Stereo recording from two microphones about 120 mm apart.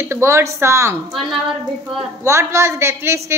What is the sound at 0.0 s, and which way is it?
Speech, 20° right (ahead or behind).